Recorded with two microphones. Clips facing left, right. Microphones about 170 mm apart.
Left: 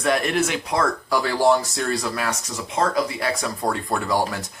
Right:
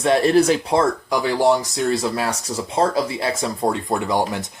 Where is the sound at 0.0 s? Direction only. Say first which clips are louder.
Right 6 dB; 30° right (ahead or behind).